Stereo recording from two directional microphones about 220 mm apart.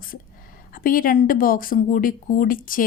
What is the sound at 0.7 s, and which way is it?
Speech, 40° left (ahead or behind).